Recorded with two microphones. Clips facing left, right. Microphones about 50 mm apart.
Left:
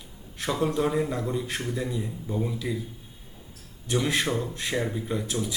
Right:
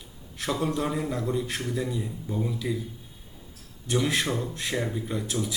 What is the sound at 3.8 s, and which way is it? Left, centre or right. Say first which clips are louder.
Speech: even; centre.